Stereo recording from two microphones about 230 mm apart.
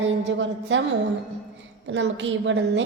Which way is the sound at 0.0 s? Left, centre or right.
Right.